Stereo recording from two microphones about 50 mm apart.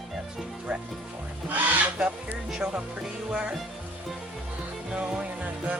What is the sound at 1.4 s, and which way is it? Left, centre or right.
Music, right.